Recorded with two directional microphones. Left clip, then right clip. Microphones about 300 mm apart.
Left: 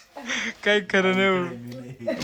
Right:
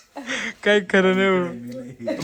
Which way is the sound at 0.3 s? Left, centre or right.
Centre.